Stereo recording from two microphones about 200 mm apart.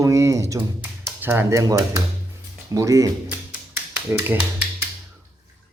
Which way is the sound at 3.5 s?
10° right (ahead or behind).